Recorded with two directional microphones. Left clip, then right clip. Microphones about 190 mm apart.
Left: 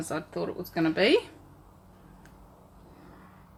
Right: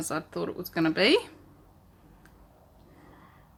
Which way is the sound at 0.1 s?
30° right (ahead or behind).